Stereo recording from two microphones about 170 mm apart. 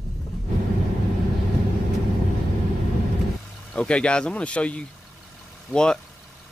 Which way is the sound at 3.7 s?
5° left (ahead or behind).